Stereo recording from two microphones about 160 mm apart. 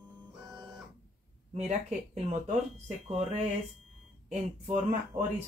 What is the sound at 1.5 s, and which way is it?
Speech, 45° right (ahead or behind).